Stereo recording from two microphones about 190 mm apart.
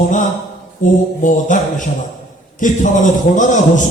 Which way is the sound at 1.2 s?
40° left (ahead or behind).